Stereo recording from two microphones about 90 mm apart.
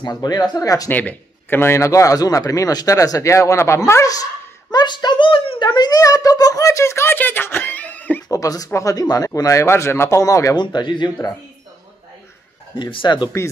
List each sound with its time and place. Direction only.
0.0 s speech: 50° left (ahead or behind)
0.8 s a man's voice: 20° left (ahead or behind); by 4.3 s 40° left (ahead or behind)
4.7 s a child's voice: 55° left (ahead or behind); by 8.2 s 15° left (ahead or behind)
8.3 s a man's voice: 40° left (ahead or behind)
10.5 s speech: 55° left (ahead or behind)
12.7 s speech: 60° left (ahead or behind)